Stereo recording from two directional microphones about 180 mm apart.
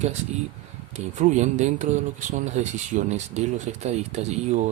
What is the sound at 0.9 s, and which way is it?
Speech, 40° right (ahead or behind).